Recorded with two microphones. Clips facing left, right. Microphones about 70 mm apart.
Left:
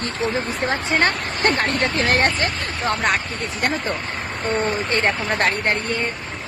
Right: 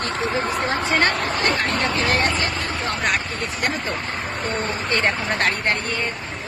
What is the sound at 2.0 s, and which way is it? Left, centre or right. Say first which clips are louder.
Speech: left 4 dB; left.